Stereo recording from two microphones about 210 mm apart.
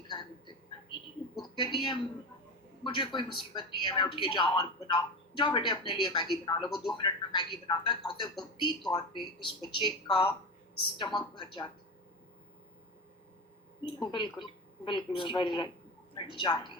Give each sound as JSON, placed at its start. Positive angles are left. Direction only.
{"t": 0.1, "sound": "a sound", "side_deg": 20}
{"t": 1.5, "sound": "a man's voice", "side_deg": 25}
{"t": 13.8, "sound": "a man's voice", "side_deg": 25}